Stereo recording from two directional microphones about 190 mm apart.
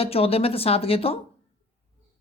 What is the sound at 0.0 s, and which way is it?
A woman's voice, 30° left (ahead or behind).